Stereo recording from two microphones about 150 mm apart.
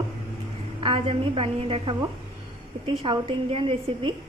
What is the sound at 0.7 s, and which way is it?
A woman's voice, 35° right (ahead or behind).